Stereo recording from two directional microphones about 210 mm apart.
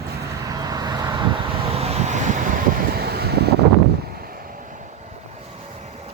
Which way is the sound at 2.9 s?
50° right (ahead or behind).